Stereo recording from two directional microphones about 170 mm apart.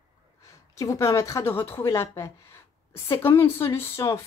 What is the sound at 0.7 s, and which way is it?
A woman's voice, 20° left (ahead or behind).